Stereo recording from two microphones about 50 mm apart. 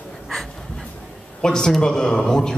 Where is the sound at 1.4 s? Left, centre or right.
Centre.